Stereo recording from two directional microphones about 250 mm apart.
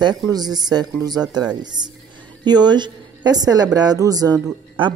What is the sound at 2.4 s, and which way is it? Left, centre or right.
A woman's voice, centre.